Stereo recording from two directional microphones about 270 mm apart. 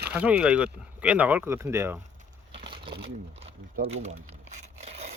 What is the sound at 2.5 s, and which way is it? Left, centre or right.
Crumpling, centre.